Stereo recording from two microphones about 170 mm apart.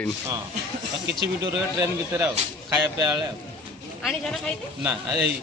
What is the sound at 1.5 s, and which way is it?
Speech, 20° right (ahead or behind).